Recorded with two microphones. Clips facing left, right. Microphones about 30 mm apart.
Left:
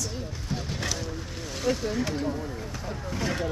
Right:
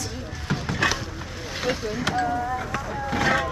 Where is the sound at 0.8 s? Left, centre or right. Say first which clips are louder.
Right 11 dB; right.